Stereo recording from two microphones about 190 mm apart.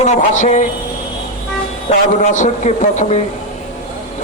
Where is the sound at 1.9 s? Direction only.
40° left (ahead or behind).